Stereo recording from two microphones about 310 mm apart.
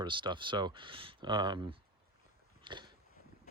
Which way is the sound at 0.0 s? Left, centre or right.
Centre.